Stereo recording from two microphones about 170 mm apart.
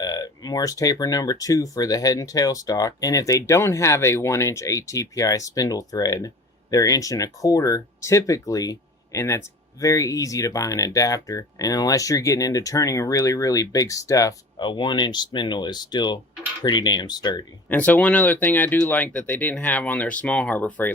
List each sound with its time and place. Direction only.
0.0 s speech: 25° left (ahead or behind)
17.7 s speech: 10° left (ahead or behind)